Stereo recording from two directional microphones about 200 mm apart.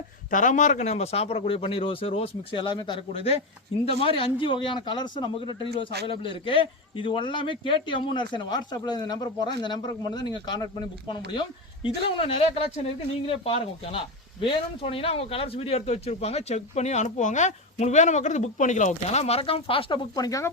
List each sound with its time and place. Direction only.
0.3 s speech: 40° left (ahead or behind); by 20.5 s 15° left (ahead or behind)